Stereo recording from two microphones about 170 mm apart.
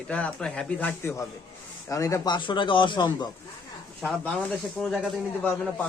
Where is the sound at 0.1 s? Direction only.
5° left (ahead or behind); by 3.2 s 25° left (ahead or behind).